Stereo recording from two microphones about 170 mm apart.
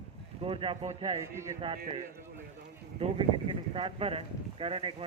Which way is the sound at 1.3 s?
15° right (ahead or behind).